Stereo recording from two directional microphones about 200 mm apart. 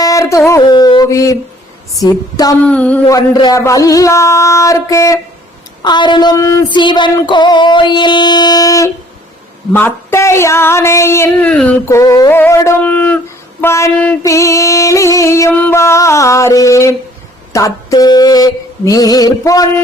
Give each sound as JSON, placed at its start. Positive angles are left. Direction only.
{"t": 0.0, "sound": "a sound", "side_deg": 15}
{"t": 2.0, "sound": "music", "side_deg": 20}
{"t": 2.6, "sound": "speech", "side_deg": 5}
{"t": 3.2, "sound": "speech", "side_deg": 15}
{"t": 5.8, "sound": "music", "side_deg": 20}
{"t": 9.7, "sound": "speech", "side_deg": 10}
{"t": 17.5, "sound": "music", "side_deg": 15}